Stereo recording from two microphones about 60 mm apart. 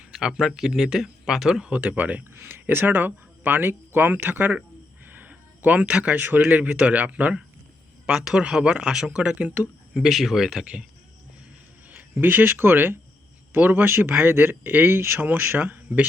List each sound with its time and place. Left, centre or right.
0.0 s speech: centre
1.7 s speech: right
2.3 s speech: right
5.0 s a sound: right
6.4 s speech: right
8.0 s speech: centre
9.3 s speech: right
9.9 s speech: centre
12.1 s speech: right